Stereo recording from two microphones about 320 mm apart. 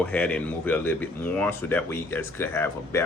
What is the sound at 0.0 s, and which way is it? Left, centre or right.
Speech, centre.